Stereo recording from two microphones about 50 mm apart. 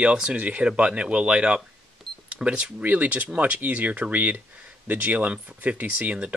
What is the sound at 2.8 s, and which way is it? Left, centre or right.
Speech, right.